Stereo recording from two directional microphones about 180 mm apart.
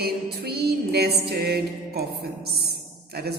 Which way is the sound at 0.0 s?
60° right (ahead or behind).